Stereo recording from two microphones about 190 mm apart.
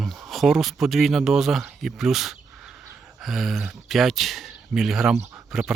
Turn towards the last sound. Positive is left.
turn(degrees=0)  # may be behind; listen again after turning